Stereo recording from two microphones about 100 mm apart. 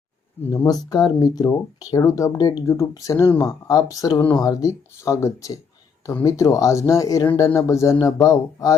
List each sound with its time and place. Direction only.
0.5 s speech: 35° left (ahead or behind)